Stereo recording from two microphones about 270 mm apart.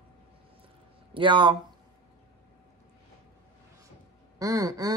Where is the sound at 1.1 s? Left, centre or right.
Centre.